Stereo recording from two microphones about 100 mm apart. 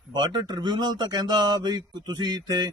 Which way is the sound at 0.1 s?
45° right (ahead or behind).